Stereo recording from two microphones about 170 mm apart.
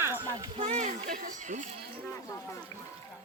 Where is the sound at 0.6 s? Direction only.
40° right (ahead or behind).